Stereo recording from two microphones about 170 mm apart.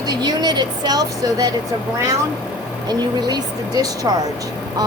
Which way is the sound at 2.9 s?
25° right (ahead or behind).